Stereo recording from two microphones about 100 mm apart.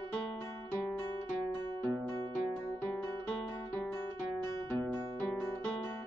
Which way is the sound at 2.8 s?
15° left (ahead or behind).